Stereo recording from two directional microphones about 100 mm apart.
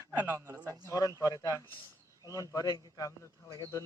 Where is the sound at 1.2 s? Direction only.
35° left (ahead or behind).